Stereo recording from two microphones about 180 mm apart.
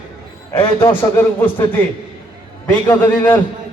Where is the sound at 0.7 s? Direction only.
15° left (ahead or behind).